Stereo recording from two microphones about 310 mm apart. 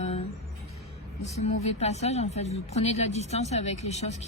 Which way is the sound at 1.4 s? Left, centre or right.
Left.